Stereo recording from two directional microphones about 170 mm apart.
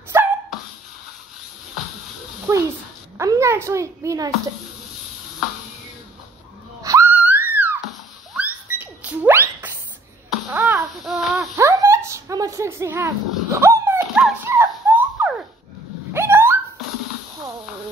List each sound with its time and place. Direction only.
0.1 s dog: 15° right (ahead or behind)
2.5 s a child's voice: 15° right (ahead or behind)
6.8 s a sound: 20° right (ahead or behind)
7.2 s music: 10° right (ahead or behind)
8.4 s rodents: 10° right (ahead or behind)
11.1 s a sound: centre (ahead or behind)
11.5 s dog: 20° right (ahead or behind)
14.4 s a sound: 10° right (ahead or behind)
16.1 s dog: 15° right (ahead or behind)